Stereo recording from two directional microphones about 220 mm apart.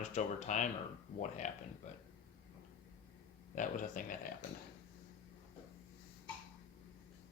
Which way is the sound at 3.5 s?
35° left (ahead or behind).